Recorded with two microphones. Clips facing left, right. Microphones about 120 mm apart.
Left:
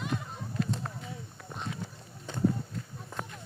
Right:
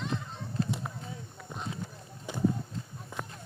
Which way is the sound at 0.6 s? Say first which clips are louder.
Even; 30° right (ahead or behind).